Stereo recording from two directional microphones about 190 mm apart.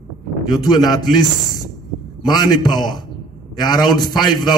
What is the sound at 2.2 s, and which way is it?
A man's voice, 20° left (ahead or behind).